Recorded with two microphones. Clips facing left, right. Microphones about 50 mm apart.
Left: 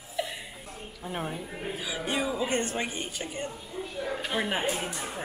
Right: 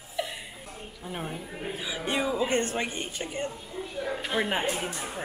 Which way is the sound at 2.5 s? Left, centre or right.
Right.